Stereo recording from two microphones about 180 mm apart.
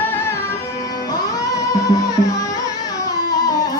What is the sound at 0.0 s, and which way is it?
Music, 10° left (ahead or behind).